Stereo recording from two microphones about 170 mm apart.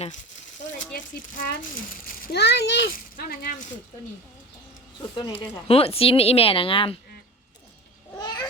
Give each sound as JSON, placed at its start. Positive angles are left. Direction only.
{"t": 0.6, "sound": "a sound", "side_deg": 50}
{"t": 0.9, "sound": "speech", "side_deg": 55}
{"t": 2.2, "sound": "a child's voice", "side_deg": 85}
{"t": 5.1, "sound": "speech", "side_deg": 30}
{"t": 8.1, "sound": "cat", "side_deg": 25}